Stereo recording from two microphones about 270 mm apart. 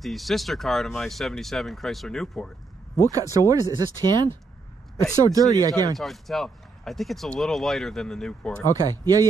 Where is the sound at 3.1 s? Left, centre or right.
Centre.